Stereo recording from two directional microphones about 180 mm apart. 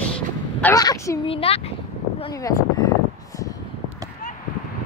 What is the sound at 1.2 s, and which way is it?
Speech, 30° left (ahead or behind).